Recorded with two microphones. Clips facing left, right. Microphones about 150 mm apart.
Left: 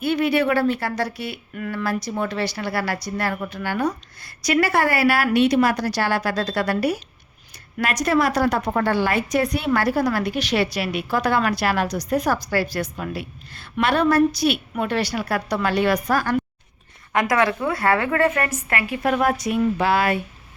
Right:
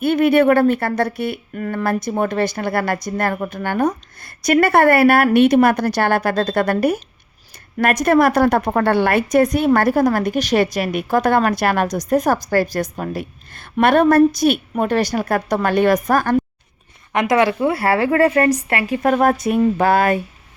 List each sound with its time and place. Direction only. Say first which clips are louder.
0.0 s a woman's voice: right 6 dB; 55° right (ahead or behind)
17.1 s a woman's voice: right 4 dB; 25° right (ahead or behind); by 20.2 s 45° right (ahead or behind)